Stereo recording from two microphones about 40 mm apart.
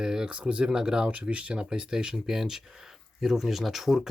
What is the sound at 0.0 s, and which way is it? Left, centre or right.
Speech, centre.